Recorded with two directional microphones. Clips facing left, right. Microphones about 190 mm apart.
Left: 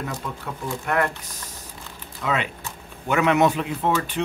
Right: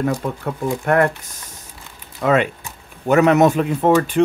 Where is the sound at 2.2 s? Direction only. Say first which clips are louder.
Right 9 dB; 50° right (ahead or behind).